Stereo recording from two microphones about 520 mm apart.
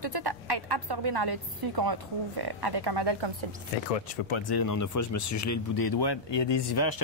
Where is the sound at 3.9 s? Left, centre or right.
Left.